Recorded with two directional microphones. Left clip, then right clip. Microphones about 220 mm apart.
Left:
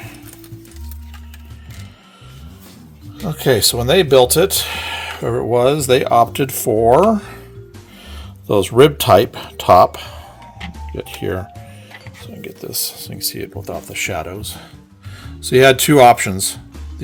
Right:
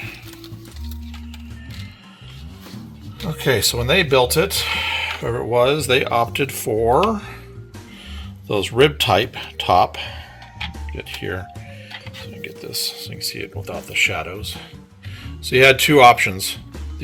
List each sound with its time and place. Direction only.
3.8 s speech: 65° left (ahead or behind)
8.4 s speech: 55° left (ahead or behind)